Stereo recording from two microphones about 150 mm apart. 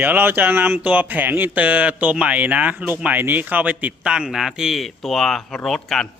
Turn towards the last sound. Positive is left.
turn(degrees=0)  # may be behind; listen again after turning